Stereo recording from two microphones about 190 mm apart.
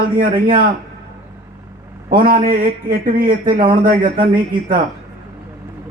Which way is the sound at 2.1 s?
50° right (ahead or behind).